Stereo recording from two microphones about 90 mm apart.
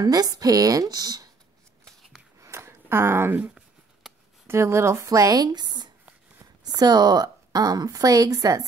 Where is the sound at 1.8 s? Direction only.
5° left (ahead or behind).